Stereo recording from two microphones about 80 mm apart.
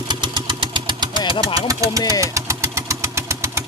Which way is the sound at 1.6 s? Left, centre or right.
Right.